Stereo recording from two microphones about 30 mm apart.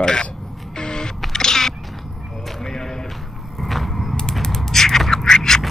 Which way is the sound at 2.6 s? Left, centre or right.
Centre.